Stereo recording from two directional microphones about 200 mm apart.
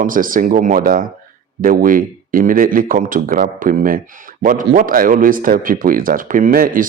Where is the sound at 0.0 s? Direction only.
45° right (ahead or behind).